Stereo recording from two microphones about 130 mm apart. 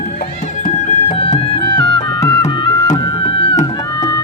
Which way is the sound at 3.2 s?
45° left (ahead or behind).